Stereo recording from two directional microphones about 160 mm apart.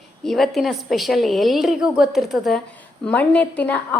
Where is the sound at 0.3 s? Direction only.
Centre (ahead or behind).